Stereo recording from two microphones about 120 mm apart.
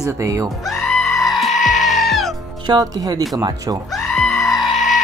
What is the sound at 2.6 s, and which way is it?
Speech, 35° right (ahead or behind).